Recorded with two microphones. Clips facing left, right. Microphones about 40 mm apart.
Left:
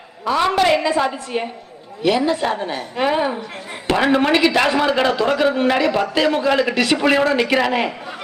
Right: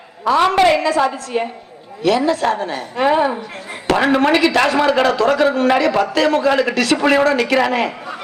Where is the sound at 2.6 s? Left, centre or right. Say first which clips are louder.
Right 2 dB; centre.